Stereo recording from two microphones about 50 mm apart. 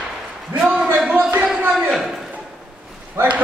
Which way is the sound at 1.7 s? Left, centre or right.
Centre.